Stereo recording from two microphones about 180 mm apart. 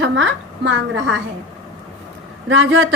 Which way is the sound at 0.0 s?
90° right.